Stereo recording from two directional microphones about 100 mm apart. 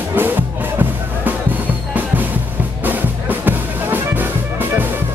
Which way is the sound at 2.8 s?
20° right (ahead or behind).